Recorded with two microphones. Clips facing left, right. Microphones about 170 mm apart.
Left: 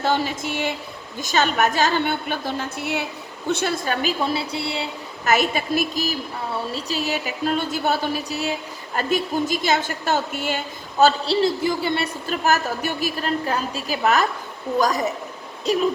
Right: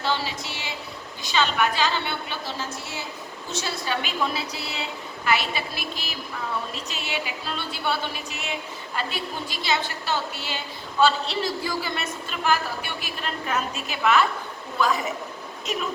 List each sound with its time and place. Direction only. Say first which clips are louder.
0.0 s a woman's voice: left 5 dB; 50° left (ahead or behind)
4.0 s a woman's voice: left 5 dB; 30° left (ahead or behind)
5.2 s a woman's voice: left 5 dB; 45° left (ahead or behind)
9.0 s a woman's voice: left 9 dB; 45° left (ahead or behind)
11.4 s speech: left 7 dB; 25° left (ahead or behind)
12.3 s a woman's voice: left 3 dB; 45° left (ahead or behind)